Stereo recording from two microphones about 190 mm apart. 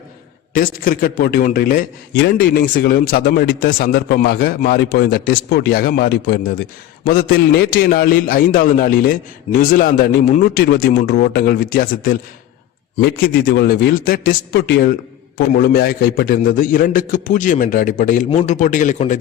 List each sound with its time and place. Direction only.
0.5 s a man's voice: 50° left (ahead or behind)
2.1 s a man's voice: 60° left (ahead or behind); by 19.2 s 40° left (ahead or behind)